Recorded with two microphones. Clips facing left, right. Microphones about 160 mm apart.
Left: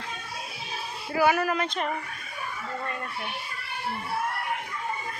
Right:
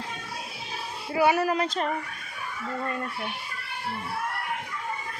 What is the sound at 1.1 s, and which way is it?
Speech, 30° right (ahead or behind).